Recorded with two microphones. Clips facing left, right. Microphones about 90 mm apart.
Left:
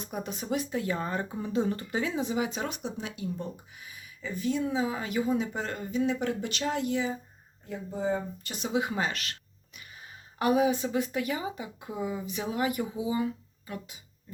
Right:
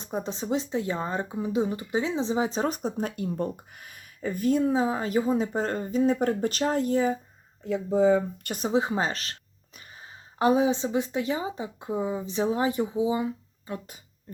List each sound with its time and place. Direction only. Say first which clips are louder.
0.0 s speech: right 4 dB; 25° right (ahead or behind)
7.6 s speech: right 10 dB; 90° right
8.4 s a woman's voice: right 2 dB; 40° right (ahead or behind); by 13.7 s 25° right (ahead or behind)